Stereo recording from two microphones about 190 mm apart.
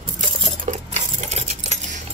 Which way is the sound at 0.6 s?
35° right (ahead or behind).